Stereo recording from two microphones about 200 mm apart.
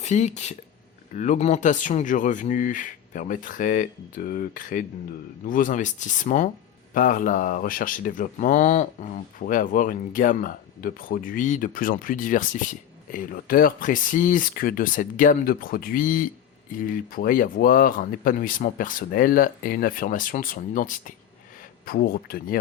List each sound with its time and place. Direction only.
0.0 s speech: 35° left (ahead or behind)